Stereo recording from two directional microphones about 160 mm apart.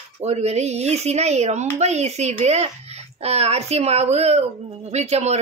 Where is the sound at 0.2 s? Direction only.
40° right (ahead or behind).